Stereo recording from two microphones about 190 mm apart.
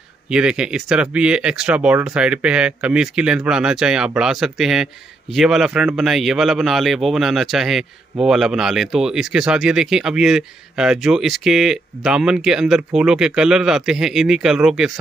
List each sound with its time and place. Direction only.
0.3 s speech: 5° right (ahead or behind)